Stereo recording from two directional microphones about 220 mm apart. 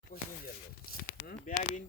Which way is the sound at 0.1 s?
45° left (ahead or behind).